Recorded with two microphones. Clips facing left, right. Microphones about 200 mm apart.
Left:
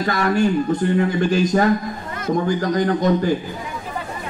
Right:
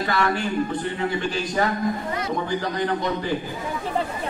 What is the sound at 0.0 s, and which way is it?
Speech, 40° left (ahead or behind).